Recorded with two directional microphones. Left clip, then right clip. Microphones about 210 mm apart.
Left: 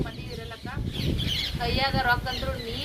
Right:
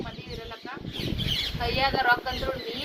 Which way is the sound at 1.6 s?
5° left (ahead or behind).